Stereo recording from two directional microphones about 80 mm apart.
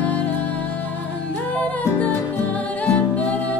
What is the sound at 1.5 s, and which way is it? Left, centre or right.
Music, centre.